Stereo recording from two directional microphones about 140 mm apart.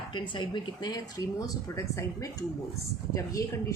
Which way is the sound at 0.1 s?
35° left (ahead or behind).